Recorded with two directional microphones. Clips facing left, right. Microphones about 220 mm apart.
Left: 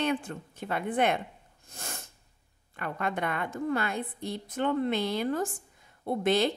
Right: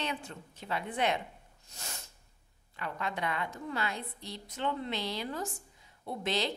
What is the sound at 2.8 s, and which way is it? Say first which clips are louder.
A woman's voice: left 4 dB; 55° left (ahead or behind).